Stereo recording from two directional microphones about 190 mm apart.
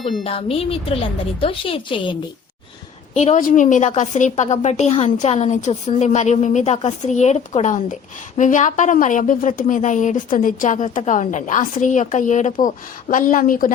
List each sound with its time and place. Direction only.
0.3 s a woman's voice: 30° left (ahead or behind)
3.2 s a woman's voice: 40° left (ahead or behind)